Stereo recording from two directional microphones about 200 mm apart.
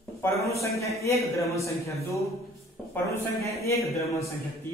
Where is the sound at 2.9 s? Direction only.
15° left (ahead or behind).